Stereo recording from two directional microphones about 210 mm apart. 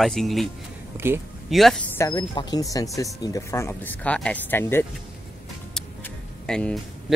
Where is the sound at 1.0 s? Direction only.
10° right (ahead or behind).